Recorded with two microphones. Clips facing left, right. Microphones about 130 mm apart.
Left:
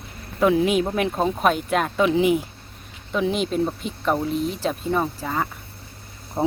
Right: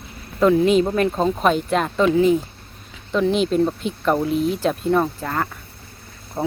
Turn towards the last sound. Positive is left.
turn(degrees=15)  # may be behind; listen again after turning